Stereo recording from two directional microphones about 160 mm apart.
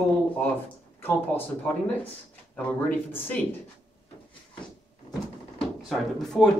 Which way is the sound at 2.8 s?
10° left (ahead or behind).